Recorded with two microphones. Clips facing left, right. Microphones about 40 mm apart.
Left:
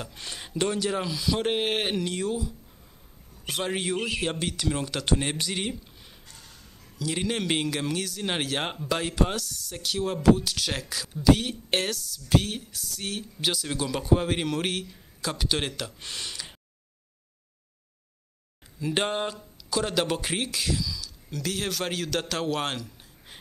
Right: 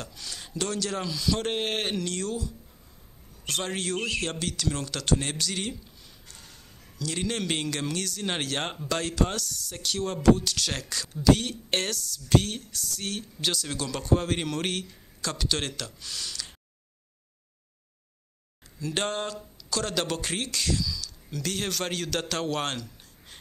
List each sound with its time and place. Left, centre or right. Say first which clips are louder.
0.1 s a man's voice: left 3 dB; left; by 15.9 s centre
16.0 s speech: left 1 dB; left
18.8 s speech: left 3 dB; centre